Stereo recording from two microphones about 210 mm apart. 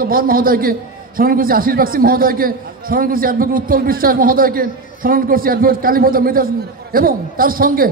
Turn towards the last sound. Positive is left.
turn(degrees=-40)  # may be behind; listen again after turning